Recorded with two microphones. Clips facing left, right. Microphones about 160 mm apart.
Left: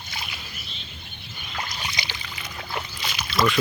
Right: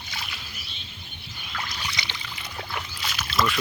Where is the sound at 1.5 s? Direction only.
25° left (ahead or behind).